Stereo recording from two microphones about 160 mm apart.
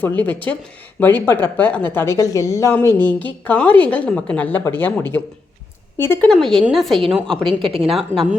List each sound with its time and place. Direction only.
0.0 s a woman's voice: 10° left (ahead or behind)
6.3 s a woman's voice: centre (ahead or behind)
7.6 s a woman's voice: 35° right (ahead or behind)
7.9 s a woman's voice: centre (ahead or behind)